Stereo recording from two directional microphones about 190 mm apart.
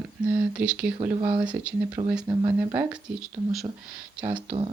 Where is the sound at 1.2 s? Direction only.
25° right (ahead or behind).